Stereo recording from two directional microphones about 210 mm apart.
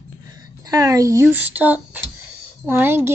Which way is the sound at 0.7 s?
15° right (ahead or behind).